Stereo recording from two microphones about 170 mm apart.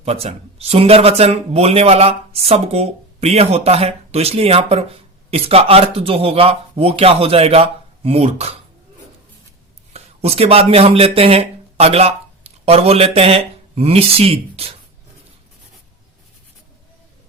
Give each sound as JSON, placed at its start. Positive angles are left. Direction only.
{"t": 0.0, "sound": "speech", "side_deg": -40}
{"t": 9.9, "sound": "speech", "side_deg": -40}